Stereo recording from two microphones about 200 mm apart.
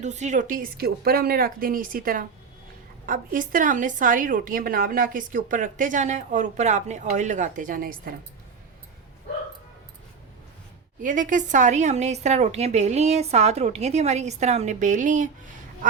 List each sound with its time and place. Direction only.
0.0 s a woman's voice: 35° right (ahead or behind)
11.0 s a woman's voice: 40° right (ahead or behind)